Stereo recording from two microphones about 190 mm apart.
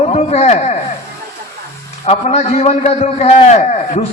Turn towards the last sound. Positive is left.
turn(degrees=35)  # may be behind; listen again after turning